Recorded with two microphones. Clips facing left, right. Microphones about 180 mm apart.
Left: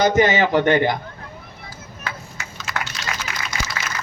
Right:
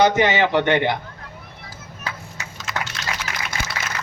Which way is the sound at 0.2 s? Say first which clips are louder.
Left 2 dB; 40° left (ahead or behind).